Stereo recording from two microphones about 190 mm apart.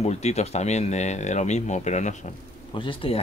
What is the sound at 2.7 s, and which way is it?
Speech, 30° left (ahead or behind).